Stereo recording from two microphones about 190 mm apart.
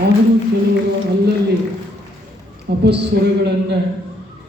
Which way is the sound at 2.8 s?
60° right (ahead or behind).